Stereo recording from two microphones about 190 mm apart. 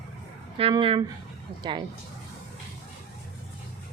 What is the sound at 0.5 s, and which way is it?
Speech, 30° right (ahead or behind).